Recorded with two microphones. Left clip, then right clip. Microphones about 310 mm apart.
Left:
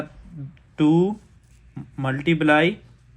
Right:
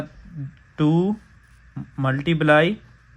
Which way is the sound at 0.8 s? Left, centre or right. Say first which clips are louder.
Left 2 dB; right.